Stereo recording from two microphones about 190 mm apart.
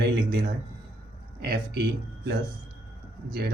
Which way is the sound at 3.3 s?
60° right (ahead or behind).